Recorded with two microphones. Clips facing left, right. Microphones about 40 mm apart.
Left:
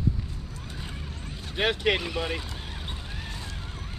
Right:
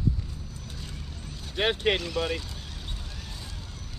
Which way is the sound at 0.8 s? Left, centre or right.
Left.